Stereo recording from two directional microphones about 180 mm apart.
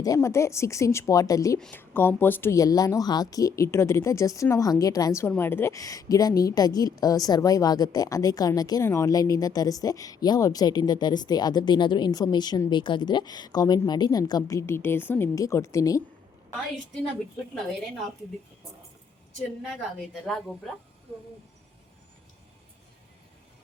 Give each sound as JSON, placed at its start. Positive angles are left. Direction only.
{"t": 0.0, "sound": "speech", "side_deg": 15}
{"t": 1.5, "sound": "a woman's voice", "side_deg": 5}